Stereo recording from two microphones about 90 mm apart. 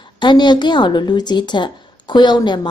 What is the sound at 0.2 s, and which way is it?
A woman's voice, 55° left (ahead or behind).